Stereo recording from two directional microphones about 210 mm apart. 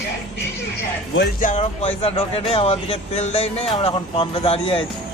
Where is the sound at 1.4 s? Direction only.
35° left (ahead or behind).